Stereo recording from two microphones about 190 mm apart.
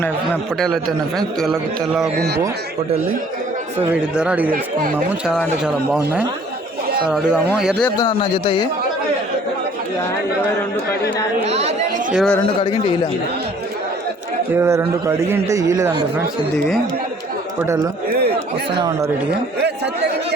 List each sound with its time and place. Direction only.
0.6 s speech: centre (ahead or behind)
3.8 s a man's voice: 5° right (ahead or behind)
7.9 s speech: 25° left (ahead or behind)
11.4 s speech: 35° right (ahead or behind)
12.1 s speech: centre (ahead or behind)
12.6 s speech: 25° left (ahead or behind)
14.5 s a man's voice: 15° right (ahead or behind)
18.1 s chatter: 55° right (ahead or behind)